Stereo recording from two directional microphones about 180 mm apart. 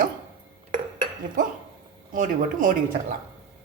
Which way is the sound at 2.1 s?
50° right (ahead or behind).